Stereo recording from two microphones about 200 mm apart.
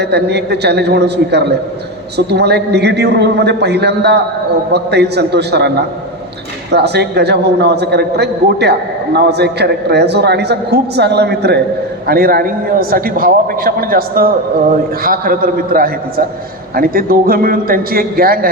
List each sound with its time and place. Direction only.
0.0 s a man's voice: 55° right (ahead or behind)